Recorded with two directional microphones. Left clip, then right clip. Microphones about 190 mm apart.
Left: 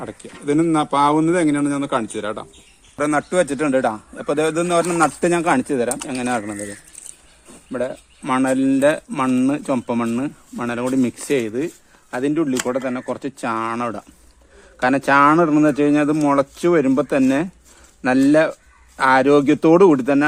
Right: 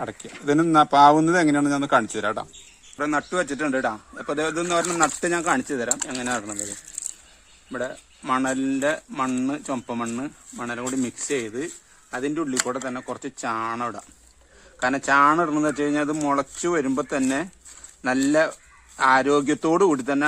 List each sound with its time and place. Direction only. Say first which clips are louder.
0.0 s speech: left 1 dB; 35° right (ahead or behind); by 2.5 s 50° right (ahead or behind)
3.0 s speech: left 6 dB; 25° left (ahead or behind)
7.7 s speech: left 6 dB; 25° left (ahead or behind)